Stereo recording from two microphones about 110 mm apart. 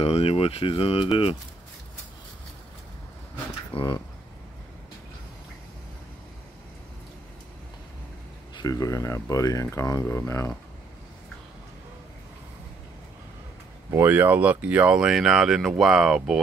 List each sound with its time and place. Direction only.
0.0 s speech: 65° left (ahead or behind)
3.7 s speech: 45° left (ahead or behind)
8.5 s speech: 35° left (ahead or behind)
13.8 s speech: 20° right (ahead or behind); by 16.3 s 5° right (ahead or behind)